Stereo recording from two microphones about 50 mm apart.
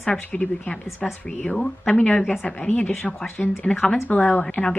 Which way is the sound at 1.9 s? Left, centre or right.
Left.